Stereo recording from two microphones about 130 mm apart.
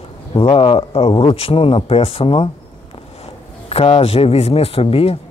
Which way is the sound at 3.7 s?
50° left (ahead or behind).